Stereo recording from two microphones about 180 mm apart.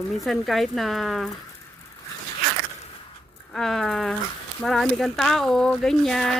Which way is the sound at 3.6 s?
Centre (ahead or behind).